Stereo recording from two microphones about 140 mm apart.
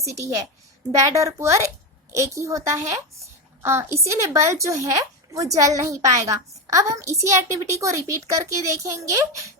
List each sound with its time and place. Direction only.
0.1 s a woman's voice: 20° right (ahead or behind)